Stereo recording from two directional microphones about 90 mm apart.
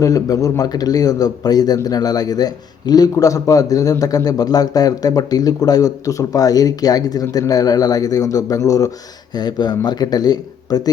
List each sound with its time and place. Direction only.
0.0 s a man's voice: 40° left (ahead or behind)
9.3 s a man's voice: 50° left (ahead or behind)